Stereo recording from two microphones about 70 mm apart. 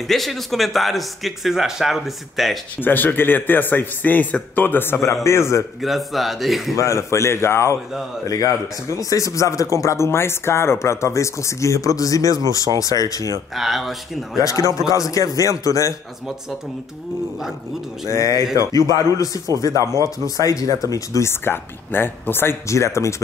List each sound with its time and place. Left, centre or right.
0.1 s speech: centre
2.8 s speech: left
5.2 s speech: left
5.8 s speech: centre
6.8 s speech: left
8.3 s a man's voice: left
13.6 s speech: centre
14.4 s speech: left
18.0 s a man's voice: left
21.3 s speech: left
22.7 s speech: left